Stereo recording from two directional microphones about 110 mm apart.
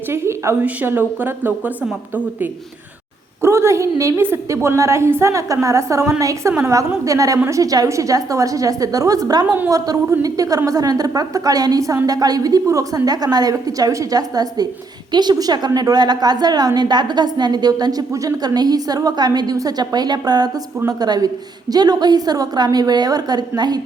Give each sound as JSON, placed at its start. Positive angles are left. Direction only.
{"t": 0.1, "sound": "a woman's voice", "side_deg": -25}
{"t": 3.4, "sound": "a woman's voice", "side_deg": -25}